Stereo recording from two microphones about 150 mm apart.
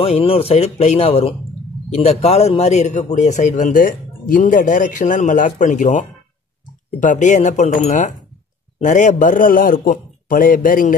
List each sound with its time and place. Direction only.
0.0 s a man's voice: 40° left (ahead or behind); by 11.0 s 65° left (ahead or behind)